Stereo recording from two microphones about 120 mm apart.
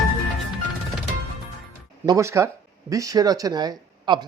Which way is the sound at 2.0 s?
25° right (ahead or behind).